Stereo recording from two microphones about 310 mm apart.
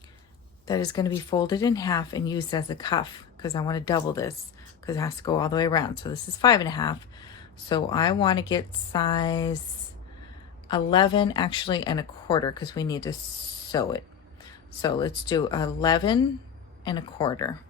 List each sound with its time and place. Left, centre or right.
0.7 s speech: centre
10.7 s speech: centre